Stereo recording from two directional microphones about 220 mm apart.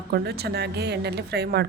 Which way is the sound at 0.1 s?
45° right (ahead or behind).